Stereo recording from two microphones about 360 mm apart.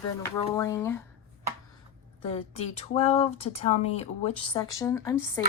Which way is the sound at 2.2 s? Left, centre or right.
Centre.